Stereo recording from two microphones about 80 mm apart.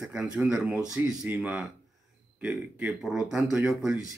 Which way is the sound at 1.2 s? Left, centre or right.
Right.